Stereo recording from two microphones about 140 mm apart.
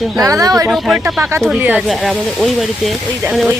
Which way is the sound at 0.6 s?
Centre (ahead or behind).